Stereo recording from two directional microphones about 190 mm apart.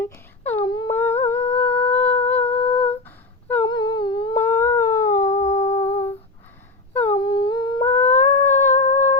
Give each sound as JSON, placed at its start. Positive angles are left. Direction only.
{"t": 0.6, "sound": "humming", "side_deg": 25}
{"t": 0.9, "sound": "humming", "side_deg": 10}
{"t": 3.7, "sound": "humming", "side_deg": 25}
{"t": 4.4, "sound": "a sound", "side_deg": 15}
{"t": 5.3, "sound": "humming", "side_deg": 35}
{"t": 6.9, "sound": "humming", "side_deg": 10}
{"t": 7.2, "sound": "humming", "side_deg": 25}
{"t": 7.9, "sound": "humming", "side_deg": 10}